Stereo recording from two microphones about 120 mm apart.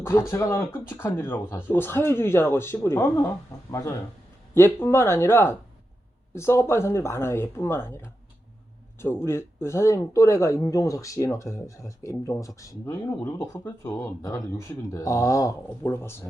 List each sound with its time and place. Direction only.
0.0 s speech: 20° left (ahead or behind)
14.2 s speech: 30° left (ahead or behind)